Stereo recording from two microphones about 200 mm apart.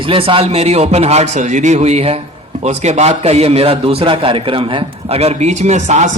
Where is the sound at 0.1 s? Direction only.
25° right (ahead or behind).